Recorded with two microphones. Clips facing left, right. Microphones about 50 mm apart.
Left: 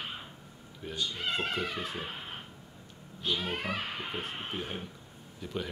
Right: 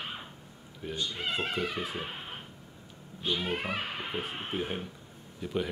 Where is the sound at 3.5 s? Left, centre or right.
Centre.